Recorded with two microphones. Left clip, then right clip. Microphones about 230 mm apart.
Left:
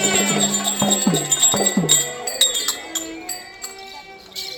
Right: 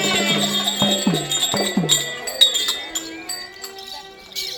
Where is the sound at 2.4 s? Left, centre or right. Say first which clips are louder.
Right 4 dB; centre.